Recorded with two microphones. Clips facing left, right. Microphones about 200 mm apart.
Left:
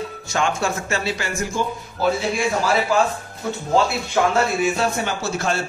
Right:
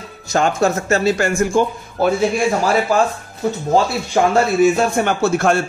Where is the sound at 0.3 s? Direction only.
40° right (ahead or behind).